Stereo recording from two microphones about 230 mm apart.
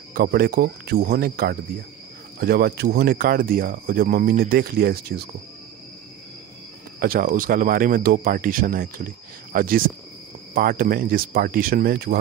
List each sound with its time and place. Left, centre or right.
0.1 s speech: right
7.0 s speech: right